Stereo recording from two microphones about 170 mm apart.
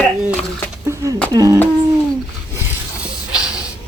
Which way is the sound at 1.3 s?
20° right (ahead or behind).